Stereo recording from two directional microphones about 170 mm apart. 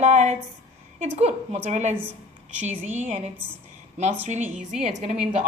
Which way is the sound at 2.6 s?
10° right (ahead or behind).